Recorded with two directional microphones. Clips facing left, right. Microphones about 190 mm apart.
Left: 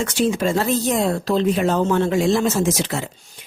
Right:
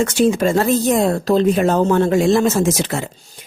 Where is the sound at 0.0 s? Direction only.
45° right (ahead or behind).